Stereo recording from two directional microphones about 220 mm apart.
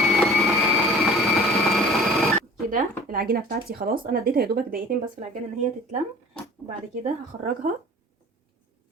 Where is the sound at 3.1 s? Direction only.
40° right (ahead or behind).